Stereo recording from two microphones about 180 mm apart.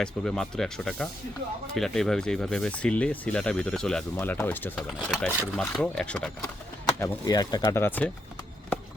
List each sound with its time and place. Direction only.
0.0 s speech: 5° left (ahead or behind)
7.0 s speech: 20° left (ahead or behind)